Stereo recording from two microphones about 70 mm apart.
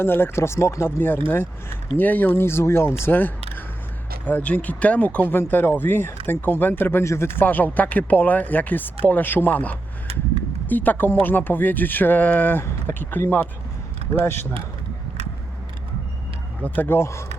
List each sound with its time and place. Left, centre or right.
0.0 s speech: left
7.0 s speech: left
16.6 s speech: left